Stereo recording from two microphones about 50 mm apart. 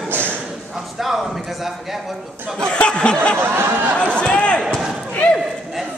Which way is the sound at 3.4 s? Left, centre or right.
Right.